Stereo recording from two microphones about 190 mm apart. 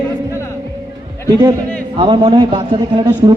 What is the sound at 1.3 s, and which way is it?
A man's voice, 20° right (ahead or behind).